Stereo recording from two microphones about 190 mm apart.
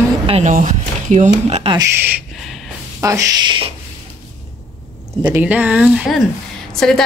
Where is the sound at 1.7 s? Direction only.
10° right (ahead or behind).